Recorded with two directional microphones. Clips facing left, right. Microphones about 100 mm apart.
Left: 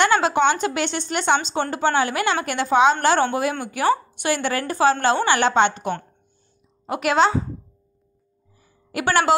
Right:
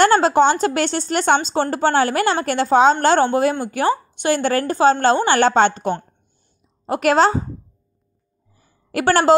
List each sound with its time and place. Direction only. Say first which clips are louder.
0.0 s a woman's voice: right 4 dB; 40° right (ahead or behind)
8.9 s a woman's voice: right 4 dB; 40° right (ahead or behind)